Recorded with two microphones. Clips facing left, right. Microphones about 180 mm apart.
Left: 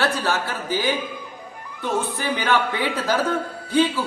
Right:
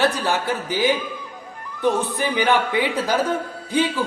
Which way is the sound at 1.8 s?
15° right (ahead or behind).